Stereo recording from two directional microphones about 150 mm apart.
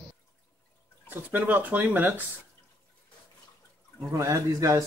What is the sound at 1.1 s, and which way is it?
Speech, 10° right (ahead or behind).